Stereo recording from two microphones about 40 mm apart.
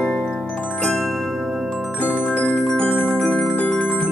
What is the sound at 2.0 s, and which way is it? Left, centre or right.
Keyboard, left.